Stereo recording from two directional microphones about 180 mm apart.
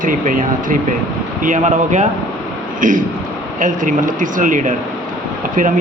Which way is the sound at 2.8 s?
45° right (ahead or behind).